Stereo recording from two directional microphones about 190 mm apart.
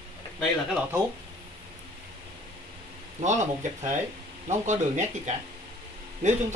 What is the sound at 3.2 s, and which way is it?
Speech, 40° right (ahead or behind).